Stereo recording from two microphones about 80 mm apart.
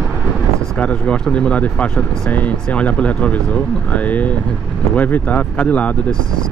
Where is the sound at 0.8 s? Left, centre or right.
Centre.